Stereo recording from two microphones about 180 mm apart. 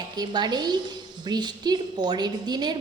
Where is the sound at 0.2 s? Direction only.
25° right (ahead or behind).